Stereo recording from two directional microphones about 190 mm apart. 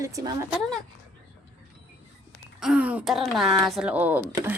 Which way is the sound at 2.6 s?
5° right (ahead or behind).